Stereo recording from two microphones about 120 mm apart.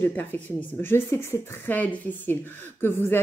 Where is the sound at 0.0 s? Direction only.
15° left (ahead or behind).